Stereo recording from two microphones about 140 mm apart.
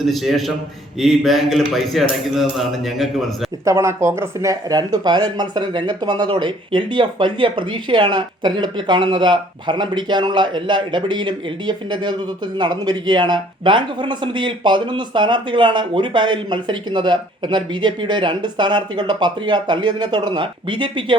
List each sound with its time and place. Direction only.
0.0 s speech: centre (ahead or behind)
3.7 s a man's voice: 20° right (ahead or behind); by 21.2 s 35° right (ahead or behind)